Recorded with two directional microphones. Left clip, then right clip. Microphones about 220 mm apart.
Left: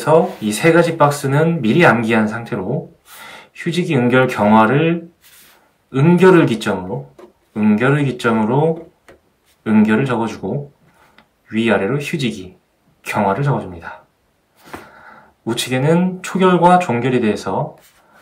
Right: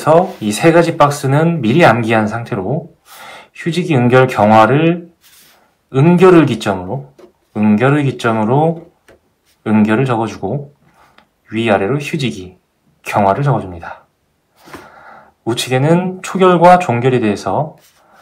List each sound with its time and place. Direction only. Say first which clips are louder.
0.0 s speech: right 3 dB; 25° right (ahead or behind)